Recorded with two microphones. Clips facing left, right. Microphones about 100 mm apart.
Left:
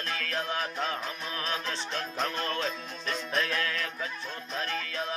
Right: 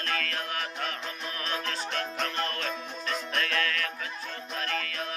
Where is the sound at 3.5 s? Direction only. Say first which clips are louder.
Right 1 dB; 20° left (ahead or behind).